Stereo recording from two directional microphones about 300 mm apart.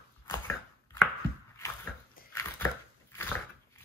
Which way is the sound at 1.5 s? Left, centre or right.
Centre.